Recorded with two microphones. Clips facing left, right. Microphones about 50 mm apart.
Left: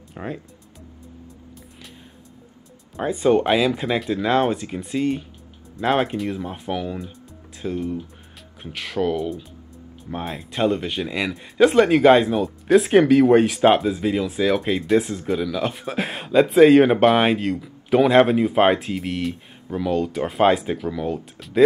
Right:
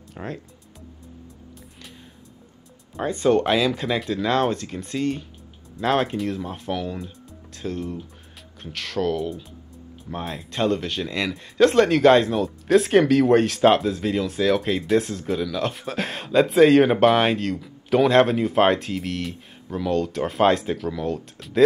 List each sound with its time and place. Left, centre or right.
0.1 s speech: centre
3.0 s speech: centre